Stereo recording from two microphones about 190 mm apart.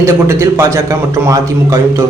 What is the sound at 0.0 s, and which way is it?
A man's voice, 15° right (ahead or behind).